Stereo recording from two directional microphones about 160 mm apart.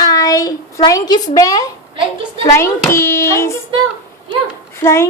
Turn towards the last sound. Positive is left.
turn(degrees=15)  # may be behind; listen again after turning